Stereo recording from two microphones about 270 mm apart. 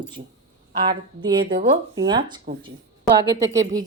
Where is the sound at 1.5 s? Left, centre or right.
Right.